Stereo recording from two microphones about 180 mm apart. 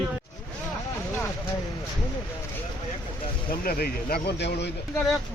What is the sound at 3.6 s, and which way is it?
Speech, 55° left (ahead or behind).